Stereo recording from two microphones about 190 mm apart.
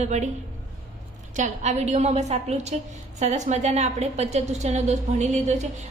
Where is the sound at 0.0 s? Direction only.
40° right (ahead or behind).